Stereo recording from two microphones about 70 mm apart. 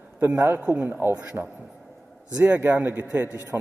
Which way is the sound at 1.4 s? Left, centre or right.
Right.